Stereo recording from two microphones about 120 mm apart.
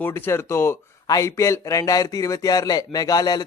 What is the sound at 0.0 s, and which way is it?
A man's voice, 20° left (ahead or behind).